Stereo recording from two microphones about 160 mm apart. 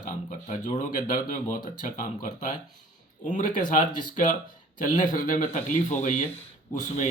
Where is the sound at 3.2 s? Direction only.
50° left (ahead or behind).